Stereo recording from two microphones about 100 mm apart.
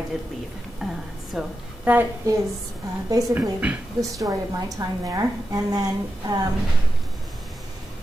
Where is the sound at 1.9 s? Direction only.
15° right (ahead or behind).